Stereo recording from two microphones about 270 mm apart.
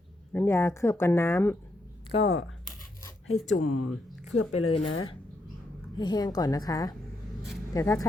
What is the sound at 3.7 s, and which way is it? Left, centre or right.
Speech, left.